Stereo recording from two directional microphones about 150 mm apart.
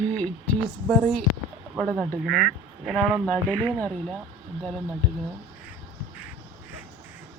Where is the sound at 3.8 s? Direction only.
5° left (ahead or behind).